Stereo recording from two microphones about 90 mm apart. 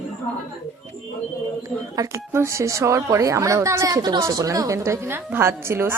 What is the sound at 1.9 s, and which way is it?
A woman's voice, 35° right (ahead or behind).